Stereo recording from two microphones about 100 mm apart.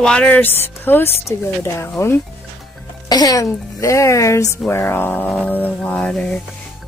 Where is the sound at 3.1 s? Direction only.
40° left (ahead or behind); by 6.3 s 10° left (ahead or behind).